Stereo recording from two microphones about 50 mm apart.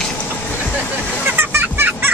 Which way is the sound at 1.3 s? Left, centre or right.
Right.